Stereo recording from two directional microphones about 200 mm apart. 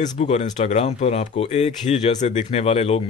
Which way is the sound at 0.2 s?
35° left (ahead or behind).